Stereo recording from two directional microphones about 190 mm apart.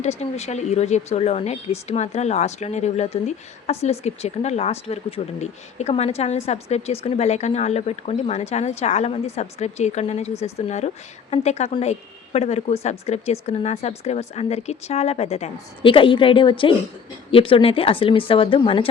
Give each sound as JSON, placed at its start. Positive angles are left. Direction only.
{"t": 0.0, "sound": "a woman's voice", "side_deg": 35}